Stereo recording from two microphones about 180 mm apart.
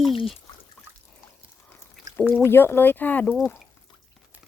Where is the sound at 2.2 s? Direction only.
10° left (ahead or behind).